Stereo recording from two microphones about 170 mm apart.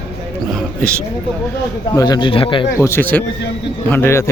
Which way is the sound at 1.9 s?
20° left (ahead or behind).